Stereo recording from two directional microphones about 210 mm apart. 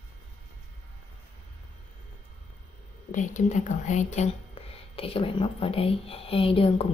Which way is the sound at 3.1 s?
35° left (ahead or behind).